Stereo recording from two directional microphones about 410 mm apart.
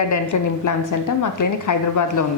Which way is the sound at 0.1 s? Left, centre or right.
Left.